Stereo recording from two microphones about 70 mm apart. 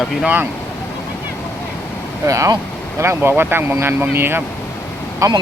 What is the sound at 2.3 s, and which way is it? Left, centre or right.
Speech, right.